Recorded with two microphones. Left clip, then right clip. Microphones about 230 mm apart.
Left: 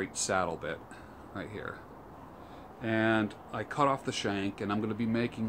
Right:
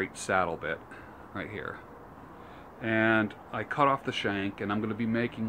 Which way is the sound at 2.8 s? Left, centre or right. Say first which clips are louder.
Right 3 dB; centre.